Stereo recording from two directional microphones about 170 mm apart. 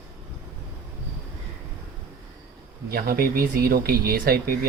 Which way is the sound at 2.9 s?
60° right (ahead or behind).